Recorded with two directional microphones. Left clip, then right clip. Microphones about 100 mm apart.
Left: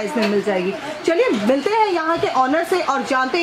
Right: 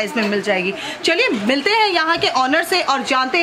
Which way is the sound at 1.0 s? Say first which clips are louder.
Even; 50° right (ahead or behind).